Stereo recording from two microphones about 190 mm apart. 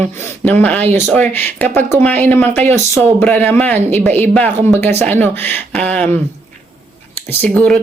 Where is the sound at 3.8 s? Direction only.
35° right (ahead or behind).